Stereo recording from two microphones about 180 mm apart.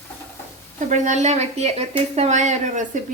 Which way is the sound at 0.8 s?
45° right (ahead or behind).